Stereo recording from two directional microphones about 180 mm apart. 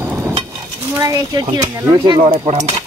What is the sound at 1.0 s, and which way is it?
Speech, 20° right (ahead or behind).